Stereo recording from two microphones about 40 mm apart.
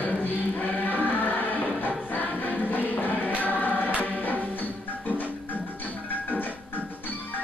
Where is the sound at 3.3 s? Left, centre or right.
Left.